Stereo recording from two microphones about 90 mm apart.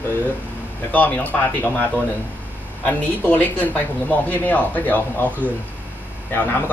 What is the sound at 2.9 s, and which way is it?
A man's voice, 20° left (ahead or behind).